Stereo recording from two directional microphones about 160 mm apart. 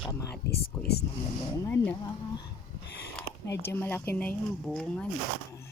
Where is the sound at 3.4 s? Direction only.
15° left (ahead or behind).